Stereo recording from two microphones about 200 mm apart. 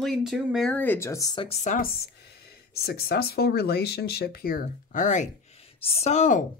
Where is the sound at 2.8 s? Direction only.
50° left (ahead or behind).